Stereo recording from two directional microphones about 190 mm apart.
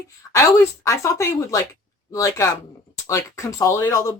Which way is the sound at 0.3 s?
15° left (ahead or behind).